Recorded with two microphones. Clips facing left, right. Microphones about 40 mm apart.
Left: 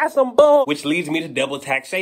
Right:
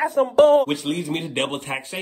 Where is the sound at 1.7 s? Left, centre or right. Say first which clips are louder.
Left 7 dB; left.